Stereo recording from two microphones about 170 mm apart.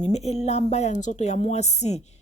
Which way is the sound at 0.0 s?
40° left (ahead or behind).